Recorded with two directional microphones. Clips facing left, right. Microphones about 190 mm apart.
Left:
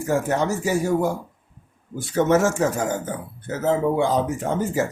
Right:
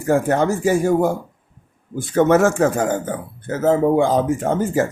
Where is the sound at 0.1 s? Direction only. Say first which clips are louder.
Right 5 dB; 55° right (ahead or behind).